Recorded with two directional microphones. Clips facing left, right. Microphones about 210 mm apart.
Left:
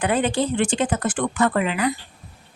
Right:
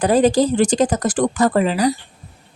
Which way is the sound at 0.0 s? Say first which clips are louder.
Right 7 dB; 40° right (ahead or behind).